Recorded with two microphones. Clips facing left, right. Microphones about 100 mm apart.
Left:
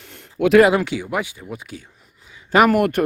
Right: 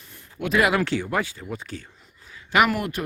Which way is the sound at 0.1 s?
75° left (ahead or behind).